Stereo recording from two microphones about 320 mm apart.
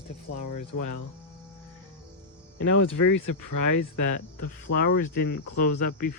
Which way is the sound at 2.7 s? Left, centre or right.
Left.